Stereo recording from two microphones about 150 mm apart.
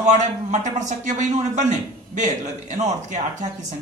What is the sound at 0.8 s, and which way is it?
A man's voice, 55° right (ahead or behind).